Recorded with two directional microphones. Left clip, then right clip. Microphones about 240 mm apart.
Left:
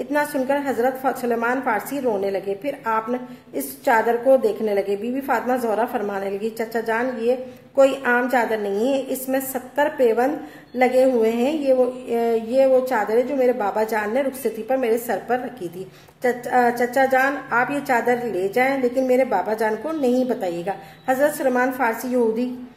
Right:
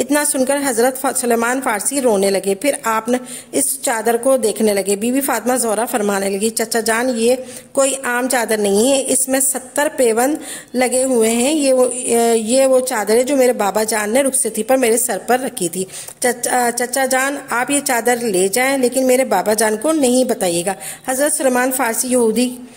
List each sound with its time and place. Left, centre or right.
0.0 s a woman's voice: right